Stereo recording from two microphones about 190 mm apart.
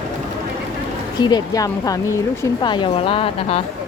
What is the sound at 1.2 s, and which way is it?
A woman's voice, 20° left (ahead or behind).